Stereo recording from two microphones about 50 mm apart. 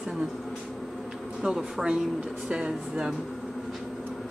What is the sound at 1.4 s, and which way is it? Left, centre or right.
A woman's voice, centre.